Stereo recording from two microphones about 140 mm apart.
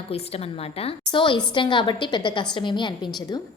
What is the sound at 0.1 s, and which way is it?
A woman's voice, 45° left (ahead or behind).